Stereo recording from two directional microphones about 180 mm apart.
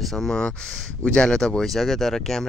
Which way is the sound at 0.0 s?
Centre (ahead or behind).